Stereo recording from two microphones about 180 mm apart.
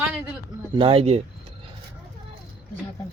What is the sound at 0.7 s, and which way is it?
Speech, 30° right (ahead or behind).